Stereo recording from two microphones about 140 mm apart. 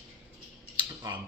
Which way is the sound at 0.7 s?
30° right (ahead or behind).